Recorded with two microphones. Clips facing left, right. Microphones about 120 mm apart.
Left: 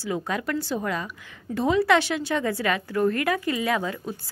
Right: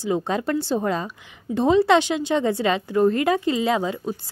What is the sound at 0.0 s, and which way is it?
A woman's voice, 25° right (ahead or behind).